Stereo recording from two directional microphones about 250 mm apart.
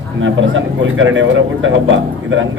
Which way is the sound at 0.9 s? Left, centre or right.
Right.